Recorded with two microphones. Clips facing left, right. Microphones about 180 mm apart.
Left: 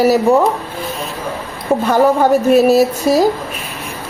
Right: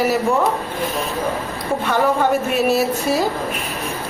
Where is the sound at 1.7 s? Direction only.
40° left (ahead or behind).